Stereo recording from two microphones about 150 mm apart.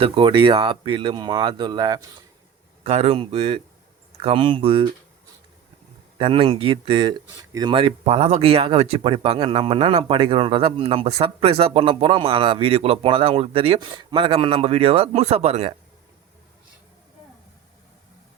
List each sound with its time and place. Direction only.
0.0 s speech: 35° right (ahead or behind)
2.8 s speech: 40° right (ahead or behind)
6.1 s speech: 35° right (ahead or behind)